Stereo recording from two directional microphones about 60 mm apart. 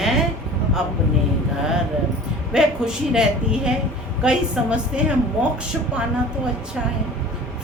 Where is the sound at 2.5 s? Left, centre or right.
Centre.